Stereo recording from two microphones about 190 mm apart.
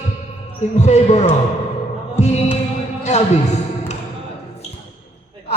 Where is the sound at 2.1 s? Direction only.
35° left (ahead or behind).